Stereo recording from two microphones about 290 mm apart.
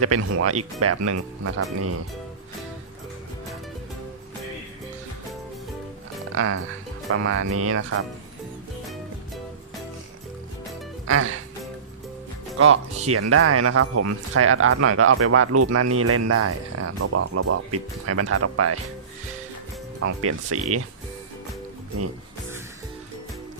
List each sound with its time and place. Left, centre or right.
0.0 s speech: right
6.3 s speech: right
11.0 s speech: right
12.5 s speech: right
20.0 s speech: right